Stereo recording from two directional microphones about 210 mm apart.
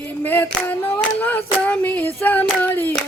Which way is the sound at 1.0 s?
5° left (ahead or behind).